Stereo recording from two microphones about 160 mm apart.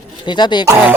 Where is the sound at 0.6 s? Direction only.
20° right (ahead or behind).